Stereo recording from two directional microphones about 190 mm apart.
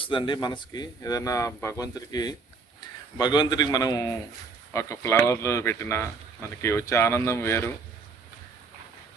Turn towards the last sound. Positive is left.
turn(degrees=10)  # may be behind; listen again after turning